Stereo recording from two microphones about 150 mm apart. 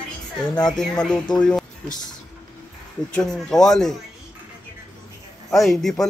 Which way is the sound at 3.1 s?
5° left (ahead or behind).